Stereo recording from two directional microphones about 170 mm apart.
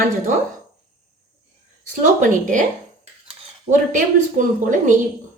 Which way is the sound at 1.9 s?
45° right (ahead or behind).